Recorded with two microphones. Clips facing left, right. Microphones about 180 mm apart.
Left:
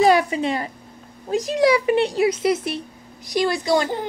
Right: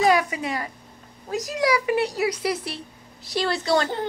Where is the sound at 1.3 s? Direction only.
25° left (ahead or behind).